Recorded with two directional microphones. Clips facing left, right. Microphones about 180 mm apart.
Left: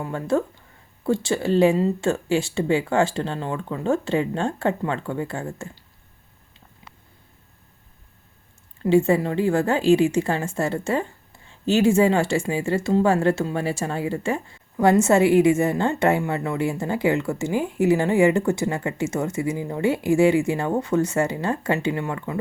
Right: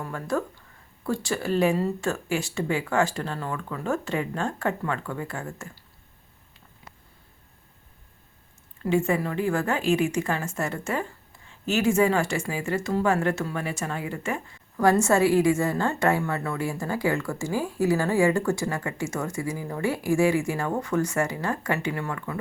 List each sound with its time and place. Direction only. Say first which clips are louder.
0.0 s a woman's voice: left 5 dB; 25° left (ahead or behind)
8.8 s a woman's voice: left 6 dB; 30° left (ahead or behind)